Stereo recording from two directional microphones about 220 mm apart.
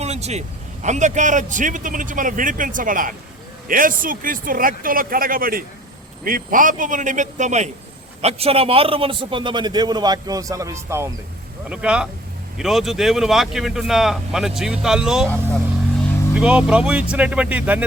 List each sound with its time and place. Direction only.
0.0 s a man's voice: 30° right (ahead or behind); by 15.3 s centre (ahead or behind)
16.3 s speech: 5° right (ahead or behind)